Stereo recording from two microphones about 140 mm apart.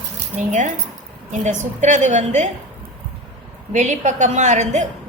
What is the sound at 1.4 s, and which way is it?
A woman's voice, 60° right (ahead or behind).